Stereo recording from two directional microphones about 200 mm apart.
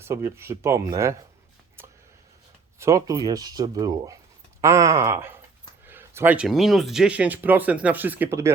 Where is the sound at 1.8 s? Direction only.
10° right (ahead or behind).